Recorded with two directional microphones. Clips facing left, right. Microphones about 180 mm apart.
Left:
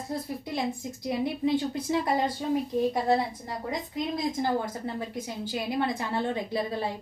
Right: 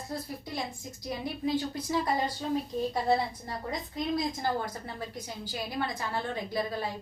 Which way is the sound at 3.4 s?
20° left (ahead or behind).